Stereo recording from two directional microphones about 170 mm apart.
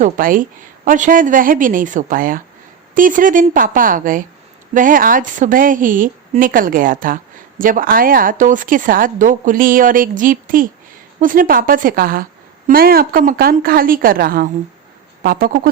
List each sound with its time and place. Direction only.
0.0 s a woman's voice: 55° right (ahead or behind)